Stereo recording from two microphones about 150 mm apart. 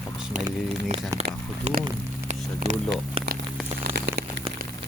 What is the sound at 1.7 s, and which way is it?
Speech, 50° right (ahead or behind).